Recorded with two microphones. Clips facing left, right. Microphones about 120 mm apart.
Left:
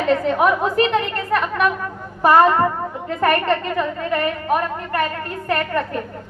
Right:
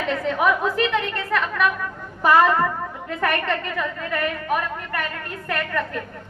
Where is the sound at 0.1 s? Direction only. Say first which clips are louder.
Left 4 dB; 45° left (ahead or behind).